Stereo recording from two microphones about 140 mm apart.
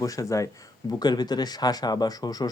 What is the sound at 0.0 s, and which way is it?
Speech, 25° left (ahead or behind).